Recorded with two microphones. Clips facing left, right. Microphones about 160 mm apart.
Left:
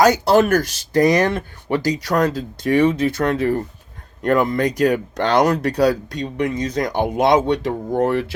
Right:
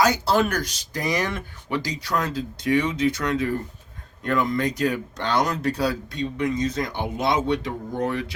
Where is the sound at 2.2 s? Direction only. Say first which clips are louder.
Left 8 dB; 40° left (ahead or behind); by 4.7 s 60° left (ahead or behind).